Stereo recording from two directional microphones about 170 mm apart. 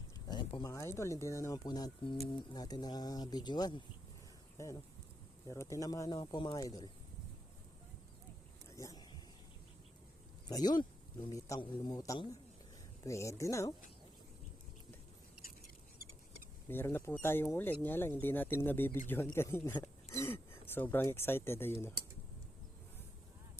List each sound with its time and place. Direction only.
0.3 s speech: 25° left (ahead or behind)
8.7 s vehicle: 20° left (ahead or behind)
10.5 s speech: 25° left (ahead or behind)
16.6 s speech: 10° left (ahead or behind)